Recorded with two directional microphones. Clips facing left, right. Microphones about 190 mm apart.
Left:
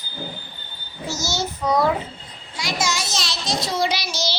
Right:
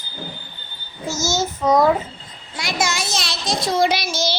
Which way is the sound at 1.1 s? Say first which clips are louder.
Right 4 dB; 45° right (ahead or behind).